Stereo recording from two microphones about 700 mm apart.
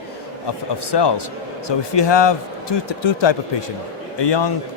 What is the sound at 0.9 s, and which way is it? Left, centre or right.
Speech, left.